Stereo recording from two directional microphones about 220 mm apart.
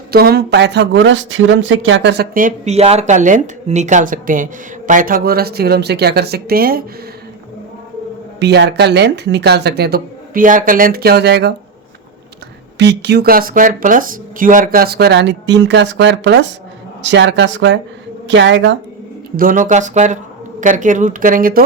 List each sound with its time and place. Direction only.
0.1 s speech: 45° right (ahead or behind)
8.4 s speech: 50° right (ahead or behind)
12.8 s a woman's voice: 50° right (ahead or behind)
19.4 s speech: 35° right (ahead or behind)